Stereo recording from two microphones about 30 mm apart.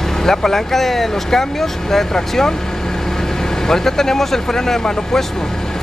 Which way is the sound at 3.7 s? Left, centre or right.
Centre.